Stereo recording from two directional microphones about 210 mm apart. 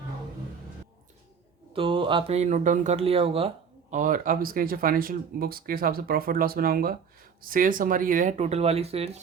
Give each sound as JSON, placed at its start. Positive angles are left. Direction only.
{"t": 1.7, "sound": "speech", "side_deg": -25}
{"t": 3.9, "sound": "speech", "side_deg": -40}